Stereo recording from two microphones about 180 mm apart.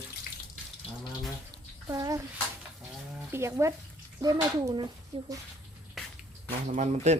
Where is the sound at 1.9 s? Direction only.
20° right (ahead or behind).